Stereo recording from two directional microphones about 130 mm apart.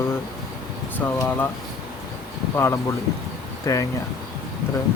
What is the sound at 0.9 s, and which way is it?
Speech, 15° left (ahead or behind).